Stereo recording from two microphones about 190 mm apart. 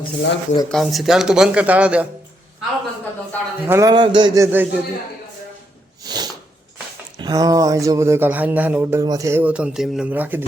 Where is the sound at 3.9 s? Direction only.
25° right (ahead or behind).